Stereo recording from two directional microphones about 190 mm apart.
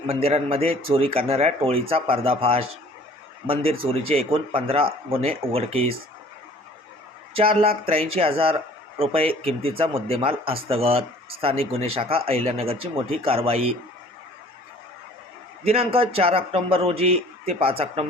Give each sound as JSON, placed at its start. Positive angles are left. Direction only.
{"t": 0.1, "sound": "speech", "side_deg": -30}
{"t": 7.3, "sound": "speech", "side_deg": -30}
{"t": 15.6, "sound": "speech", "side_deg": -30}